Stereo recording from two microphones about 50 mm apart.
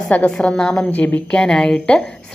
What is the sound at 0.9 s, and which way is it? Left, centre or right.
Speech, left.